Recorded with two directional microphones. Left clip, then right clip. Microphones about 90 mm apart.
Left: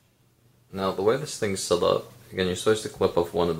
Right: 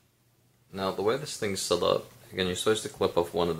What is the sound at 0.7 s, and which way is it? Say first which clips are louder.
Speech: left 4 dB; 20° right (ahead or behind).